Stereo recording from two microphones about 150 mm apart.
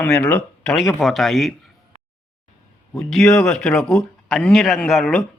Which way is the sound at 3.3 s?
5° left (ahead or behind).